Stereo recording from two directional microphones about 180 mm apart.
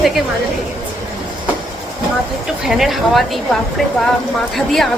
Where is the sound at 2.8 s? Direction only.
Centre (ahead or behind).